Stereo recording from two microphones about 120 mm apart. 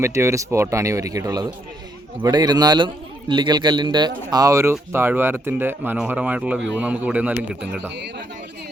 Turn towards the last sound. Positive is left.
turn(degrees=-15)  # may be behind; listen again after turning